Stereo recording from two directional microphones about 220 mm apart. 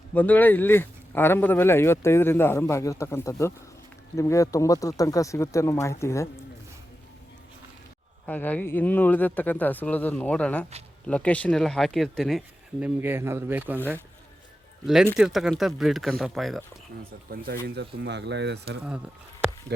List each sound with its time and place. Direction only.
0.1 s speech: 10° left (ahead or behind)
8.3 s speech: 5° left (ahead or behind)
12.8 s speech: 10° right (ahead or behind)
17.0 s speech: 40° right (ahead or behind)